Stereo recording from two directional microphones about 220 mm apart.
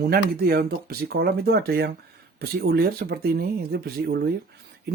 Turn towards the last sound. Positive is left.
turn(degrees=-45)  # may be behind; listen again after turning